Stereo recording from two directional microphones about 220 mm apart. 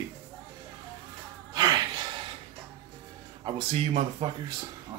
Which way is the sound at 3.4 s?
30° right (ahead or behind).